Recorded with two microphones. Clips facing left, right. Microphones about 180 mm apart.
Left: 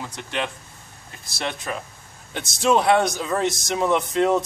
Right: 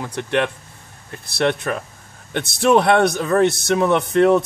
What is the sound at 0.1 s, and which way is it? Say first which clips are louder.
Speech: right 12 dB; 60° right (ahead or behind).